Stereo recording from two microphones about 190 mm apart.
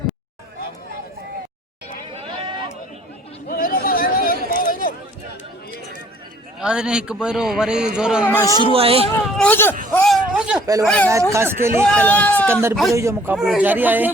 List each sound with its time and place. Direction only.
2.1 s a sound: 25° right (ahead or behind)
3.5 s a sound: 50° left (ahead or behind)
6.6 s a man's voice: 5° right (ahead or behind)
8.2 s speech: 10° left (ahead or behind)
8.5 s speech: 30° right (ahead or behind)
9.4 s speech: 10° left (ahead or behind)
9.9 s a sound: 5° left (ahead or behind)
10.3 s a sound: 5° right (ahead or behind)
10.8 s speech: 5° left (ahead or behind)
11.1 s speech: 15° right (ahead or behind)
11.9 s speech: 10° left (ahead or behind)
12.5 s speech: 15° right (ahead or behind)
13.3 s speech: 5° right (ahead or behind)